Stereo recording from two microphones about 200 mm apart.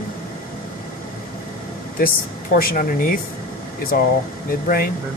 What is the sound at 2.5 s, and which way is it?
Speech, 45° left (ahead or behind).